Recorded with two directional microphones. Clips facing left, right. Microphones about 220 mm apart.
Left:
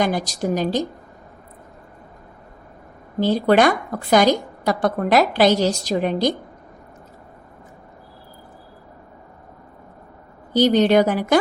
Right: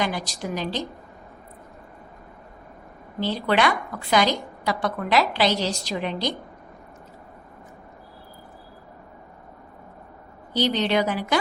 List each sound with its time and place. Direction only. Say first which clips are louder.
0.0 s a woman's voice: left 6 dB; 45° left (ahead or behind)
3.2 s a woman's voice: left 7 dB; 45° left (ahead or behind)
10.5 s a woman's voice: left 8 dB; 45° left (ahead or behind)